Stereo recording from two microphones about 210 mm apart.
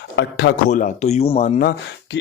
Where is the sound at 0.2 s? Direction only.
55° left (ahead or behind).